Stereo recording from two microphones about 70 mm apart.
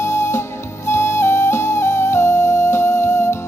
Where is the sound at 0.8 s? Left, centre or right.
Left.